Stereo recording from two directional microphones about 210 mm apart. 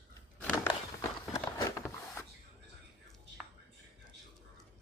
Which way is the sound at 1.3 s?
15° left (ahead or behind).